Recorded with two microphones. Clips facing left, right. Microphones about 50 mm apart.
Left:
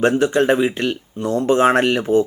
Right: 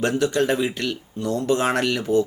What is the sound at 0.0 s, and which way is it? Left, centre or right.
Speech, left.